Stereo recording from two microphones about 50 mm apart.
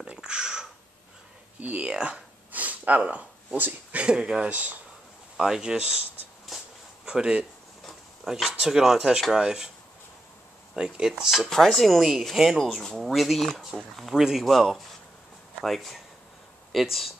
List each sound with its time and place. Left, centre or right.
0.0 s a sound: centre
1.6 s a sound: right
3.5 s speech: right
4.0 s speech: centre
5.4 s speech: centre
6.5 s a sound: centre
7.1 s speech: right
10.8 s speech: centre
14.1 s speech: centre
14.4 s speech: centre